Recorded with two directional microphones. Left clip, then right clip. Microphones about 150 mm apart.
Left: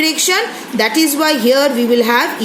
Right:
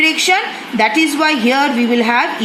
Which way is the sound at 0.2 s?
25° right (ahead or behind).